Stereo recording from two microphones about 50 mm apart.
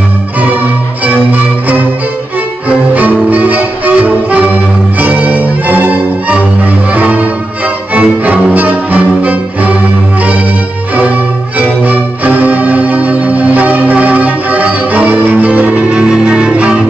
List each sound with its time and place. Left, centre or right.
1.0 s music: right
11.0 s music: right